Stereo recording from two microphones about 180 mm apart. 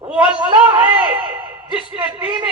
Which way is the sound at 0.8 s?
5° right (ahead or behind).